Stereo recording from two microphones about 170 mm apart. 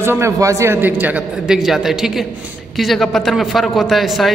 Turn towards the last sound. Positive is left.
turn(degrees=0)  # may be behind; listen again after turning